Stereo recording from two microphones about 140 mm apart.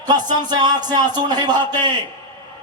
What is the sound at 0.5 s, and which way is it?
A man's voice, 30° right (ahead or behind).